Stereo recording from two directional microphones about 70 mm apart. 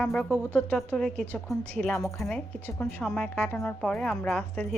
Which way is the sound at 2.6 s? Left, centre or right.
Left.